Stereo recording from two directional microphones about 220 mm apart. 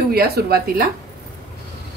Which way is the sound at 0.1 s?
45° right (ahead or behind).